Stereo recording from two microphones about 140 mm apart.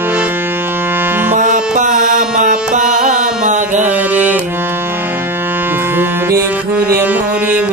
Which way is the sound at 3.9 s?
10° right (ahead or behind).